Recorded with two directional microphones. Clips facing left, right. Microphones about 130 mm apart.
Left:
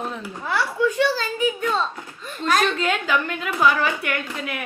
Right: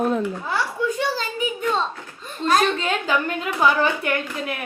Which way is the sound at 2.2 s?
30° right (ahead or behind).